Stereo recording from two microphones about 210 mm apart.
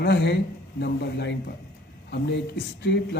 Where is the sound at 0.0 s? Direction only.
55° left (ahead or behind).